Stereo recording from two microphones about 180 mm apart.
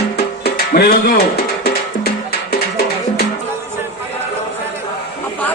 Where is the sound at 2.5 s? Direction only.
60° left (ahead or behind).